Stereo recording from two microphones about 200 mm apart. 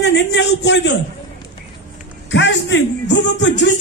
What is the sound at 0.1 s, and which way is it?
Speech, 60° left (ahead or behind).